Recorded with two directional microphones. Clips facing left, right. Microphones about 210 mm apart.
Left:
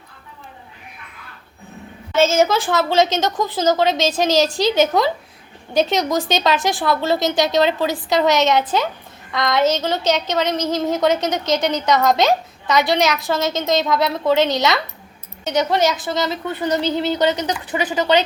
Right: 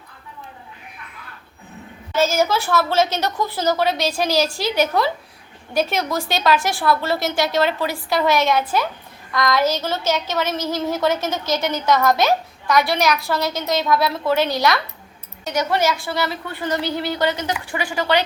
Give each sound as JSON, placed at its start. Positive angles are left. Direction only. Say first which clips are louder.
{"t": 2.1, "sound": "a woman's voice", "louder": "left 3 dB", "side_deg": 25}